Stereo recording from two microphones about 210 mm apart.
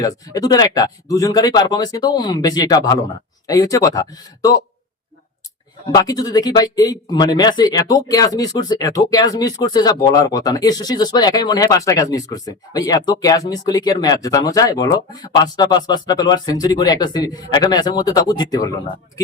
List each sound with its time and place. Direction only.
0.0 s speech: 20° left (ahead or behind)
5.9 s speech: 20° left (ahead or behind)